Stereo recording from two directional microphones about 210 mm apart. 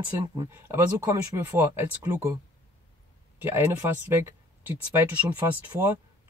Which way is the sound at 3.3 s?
10° right (ahead or behind).